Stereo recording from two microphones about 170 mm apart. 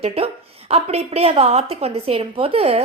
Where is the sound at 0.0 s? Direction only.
35° right (ahead or behind).